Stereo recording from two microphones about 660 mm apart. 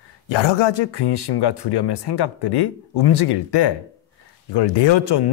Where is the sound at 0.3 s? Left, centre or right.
Left.